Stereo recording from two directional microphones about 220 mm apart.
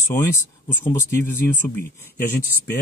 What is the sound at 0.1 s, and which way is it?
Speech, 10° left (ahead or behind).